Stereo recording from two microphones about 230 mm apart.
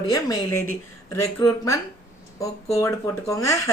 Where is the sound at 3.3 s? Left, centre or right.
Centre.